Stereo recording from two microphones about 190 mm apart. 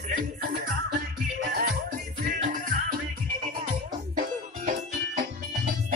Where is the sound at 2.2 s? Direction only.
45° right (ahead or behind).